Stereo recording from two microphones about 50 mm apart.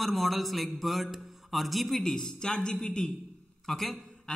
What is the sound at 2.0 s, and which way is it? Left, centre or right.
Speech, centre.